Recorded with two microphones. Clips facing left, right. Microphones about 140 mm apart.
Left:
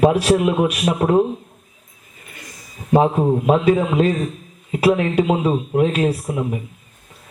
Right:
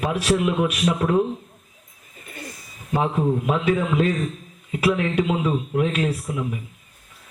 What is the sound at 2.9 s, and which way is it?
Speech, 35° left (ahead or behind).